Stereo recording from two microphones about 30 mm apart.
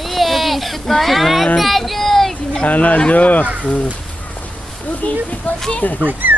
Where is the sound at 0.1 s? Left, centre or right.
Centre.